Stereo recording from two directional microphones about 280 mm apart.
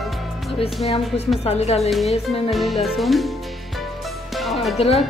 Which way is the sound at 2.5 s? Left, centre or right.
Centre.